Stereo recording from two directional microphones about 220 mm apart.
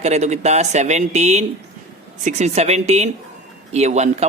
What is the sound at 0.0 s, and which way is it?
Speech, 30° right (ahead or behind).